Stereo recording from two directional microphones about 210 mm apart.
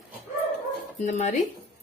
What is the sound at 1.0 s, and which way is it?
Speech, 35° left (ahead or behind).